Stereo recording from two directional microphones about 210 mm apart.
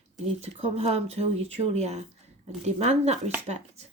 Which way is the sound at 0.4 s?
30° right (ahead or behind).